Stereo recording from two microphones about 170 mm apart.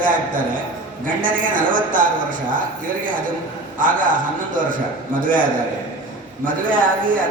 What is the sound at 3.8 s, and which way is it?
A man's voice, 50° right (ahead or behind).